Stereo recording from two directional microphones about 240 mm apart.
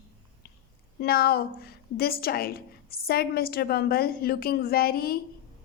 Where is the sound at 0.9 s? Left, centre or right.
Left.